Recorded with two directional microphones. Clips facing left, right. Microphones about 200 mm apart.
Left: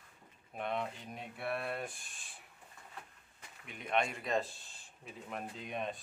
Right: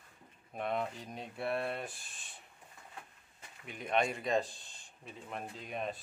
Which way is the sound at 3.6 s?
Centre (ahead or behind).